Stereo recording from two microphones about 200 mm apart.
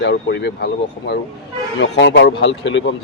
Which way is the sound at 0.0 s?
60° left (ahead or behind).